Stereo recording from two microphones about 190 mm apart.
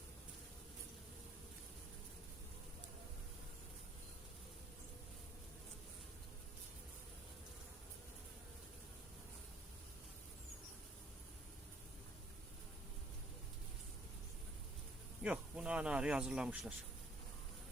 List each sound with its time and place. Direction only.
15.2 s speech: 5° right (ahead or behind)